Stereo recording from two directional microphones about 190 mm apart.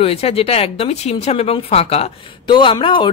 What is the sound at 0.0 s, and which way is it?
Speech, 30° left (ahead or behind).